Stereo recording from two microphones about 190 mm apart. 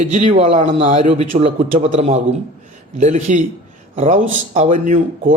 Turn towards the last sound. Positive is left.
turn(degrees=-40)  # may be behind; listen again after turning